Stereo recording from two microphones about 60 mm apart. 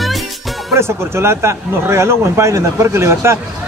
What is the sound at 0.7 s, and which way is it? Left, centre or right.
Speech, right.